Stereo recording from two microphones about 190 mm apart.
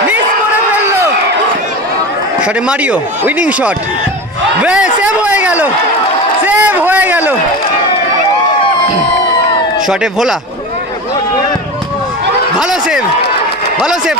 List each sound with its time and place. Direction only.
2.4 s a man's voice: 5° right (ahead or behind)
4.6 s a sound: 5° right (ahead or behind)
9.9 s speech: 5° right (ahead or behind)